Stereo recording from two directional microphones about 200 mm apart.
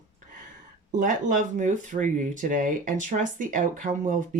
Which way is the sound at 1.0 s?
40° right (ahead or behind).